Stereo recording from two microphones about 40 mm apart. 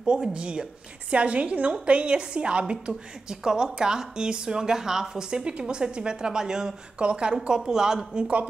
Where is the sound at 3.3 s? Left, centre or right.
Centre.